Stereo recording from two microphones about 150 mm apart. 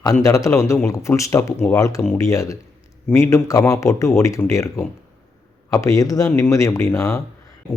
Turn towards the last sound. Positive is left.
turn(degrees=20)  # may be behind; listen again after turning